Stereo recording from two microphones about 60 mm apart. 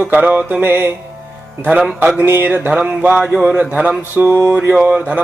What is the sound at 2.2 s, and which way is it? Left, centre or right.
Speech, right.